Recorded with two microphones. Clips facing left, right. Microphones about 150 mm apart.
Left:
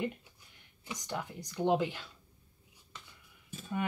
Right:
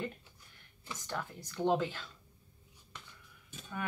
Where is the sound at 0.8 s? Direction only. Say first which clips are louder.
Left 2 dB; 15° left (ahead or behind).